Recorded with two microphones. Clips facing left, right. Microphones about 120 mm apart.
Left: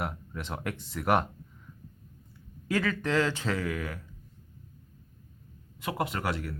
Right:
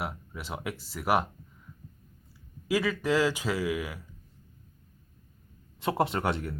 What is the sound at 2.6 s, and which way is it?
Speech, 10° right (ahead or behind).